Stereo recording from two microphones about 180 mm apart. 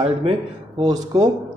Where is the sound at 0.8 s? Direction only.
20° right (ahead or behind).